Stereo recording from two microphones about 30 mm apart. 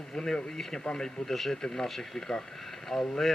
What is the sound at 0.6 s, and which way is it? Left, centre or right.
Speech, centre.